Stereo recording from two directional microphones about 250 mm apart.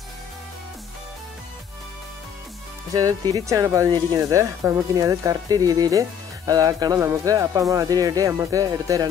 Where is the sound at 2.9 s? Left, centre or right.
Centre.